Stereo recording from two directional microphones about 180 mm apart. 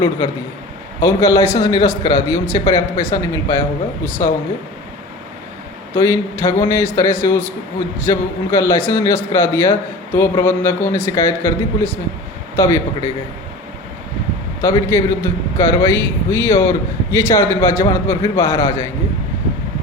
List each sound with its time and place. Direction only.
0.9 s a man's voice: 15° left (ahead or behind)
5.9 s a man's voice: 15° left (ahead or behind)
14.6 s a man's voice: 15° left (ahead or behind)